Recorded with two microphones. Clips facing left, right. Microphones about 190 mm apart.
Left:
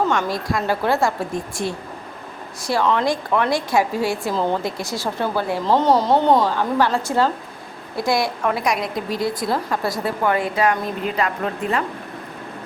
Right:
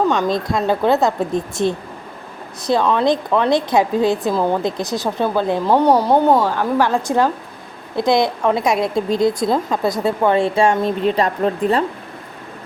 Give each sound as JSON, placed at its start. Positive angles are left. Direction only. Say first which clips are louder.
{"t": 0.1, "sound": "a woman's voice", "louder": "right 4 dB", "side_deg": -20}